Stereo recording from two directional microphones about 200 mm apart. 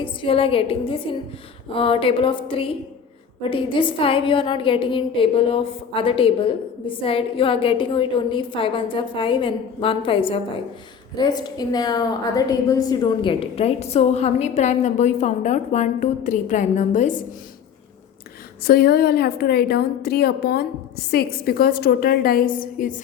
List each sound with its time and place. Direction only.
0.0 s a woman's voice: 25° left (ahead or behind)
18.6 s a woman's voice: 50° left (ahead or behind)